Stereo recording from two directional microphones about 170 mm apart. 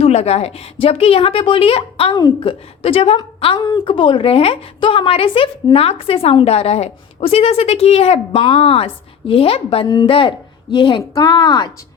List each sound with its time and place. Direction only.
0.0 s a woman's voice: 40° left (ahead or behind)